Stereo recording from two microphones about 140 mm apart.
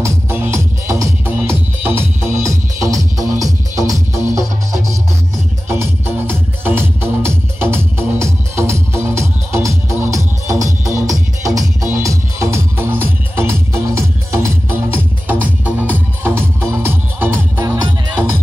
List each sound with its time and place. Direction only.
0.0 s music: 15° right (ahead or behind)
5.7 s music: 15° right (ahead or behind)